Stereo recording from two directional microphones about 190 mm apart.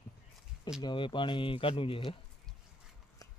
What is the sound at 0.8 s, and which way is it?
Speech, 25° left (ahead or behind).